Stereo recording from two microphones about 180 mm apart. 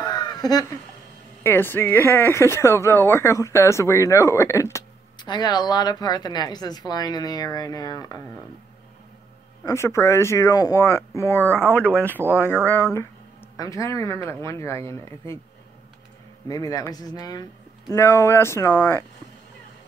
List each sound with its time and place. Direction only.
0.0 s a sound: 25° left (ahead or behind)
1.4 s speech: 10° left (ahead or behind)
9.7 s speech: 15° left (ahead or behind)
16.4 s speech: 20° left (ahead or behind)